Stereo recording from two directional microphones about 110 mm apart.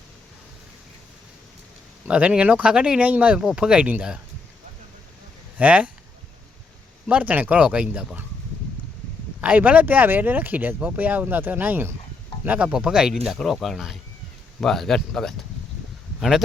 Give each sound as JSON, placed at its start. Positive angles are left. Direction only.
{"t": 2.0, "sound": "speech", "side_deg": -10}
{"t": 5.5, "sound": "speech", "side_deg": -10}
{"t": 7.1, "sound": "speech", "side_deg": -15}
{"t": 9.4, "sound": "speech", "side_deg": -15}